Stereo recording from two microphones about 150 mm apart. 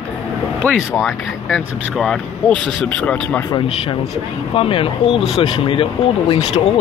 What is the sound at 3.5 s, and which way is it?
Speech, 40° left (ahead or behind).